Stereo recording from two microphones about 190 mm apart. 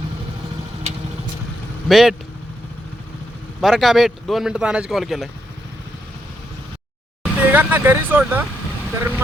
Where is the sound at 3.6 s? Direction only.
Centre (ahead or behind).